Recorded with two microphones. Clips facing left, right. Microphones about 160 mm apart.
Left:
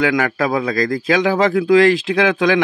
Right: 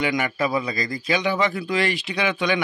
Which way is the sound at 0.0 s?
90° left.